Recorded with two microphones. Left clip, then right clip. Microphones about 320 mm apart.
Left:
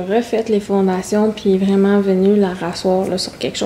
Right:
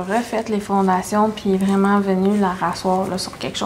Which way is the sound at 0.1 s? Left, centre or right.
Right.